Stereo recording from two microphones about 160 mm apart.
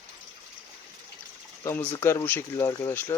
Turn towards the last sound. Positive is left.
turn(degrees=15)  # may be behind; listen again after turning